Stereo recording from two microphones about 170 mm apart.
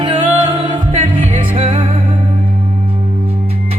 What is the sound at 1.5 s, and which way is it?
Music, 30° right (ahead or behind).